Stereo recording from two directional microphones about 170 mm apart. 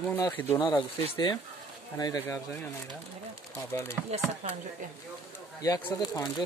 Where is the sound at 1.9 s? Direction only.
20° left (ahead or behind).